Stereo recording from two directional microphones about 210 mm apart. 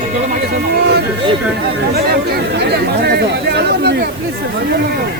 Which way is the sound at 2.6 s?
50° right (ahead or behind).